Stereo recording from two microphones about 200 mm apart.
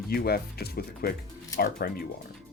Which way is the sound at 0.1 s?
50° left (ahead or behind).